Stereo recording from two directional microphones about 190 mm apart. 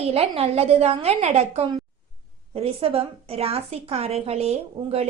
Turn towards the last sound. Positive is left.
turn(degrees=-35)  # may be behind; listen again after turning